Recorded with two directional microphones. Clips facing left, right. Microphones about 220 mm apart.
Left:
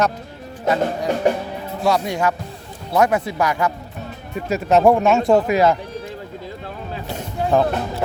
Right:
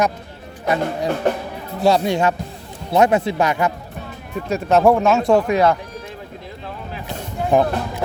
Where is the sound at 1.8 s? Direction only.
30° right (ahead or behind).